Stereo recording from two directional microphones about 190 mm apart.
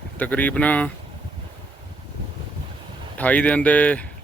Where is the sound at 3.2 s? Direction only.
5° left (ahead or behind).